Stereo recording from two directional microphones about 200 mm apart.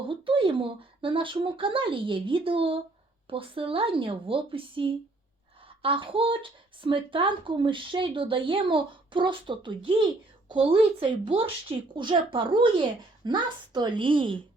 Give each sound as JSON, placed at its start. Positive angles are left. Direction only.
{"t": 0.1, "sound": "speech", "side_deg": -25}